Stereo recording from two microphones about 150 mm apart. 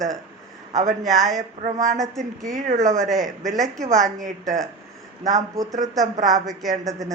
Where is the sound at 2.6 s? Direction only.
55° right (ahead or behind).